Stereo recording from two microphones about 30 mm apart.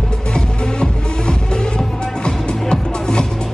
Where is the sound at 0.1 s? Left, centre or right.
Left.